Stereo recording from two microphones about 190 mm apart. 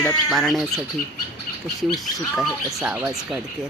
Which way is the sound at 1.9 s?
Centre (ahead or behind).